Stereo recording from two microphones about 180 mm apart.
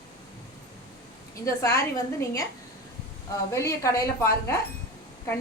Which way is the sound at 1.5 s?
15° left (ahead or behind).